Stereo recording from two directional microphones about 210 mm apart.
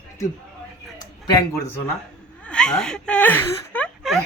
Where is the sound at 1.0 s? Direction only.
20° left (ahead or behind).